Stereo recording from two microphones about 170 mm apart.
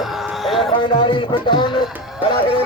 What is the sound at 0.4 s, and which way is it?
Speech, centre (ahead or behind).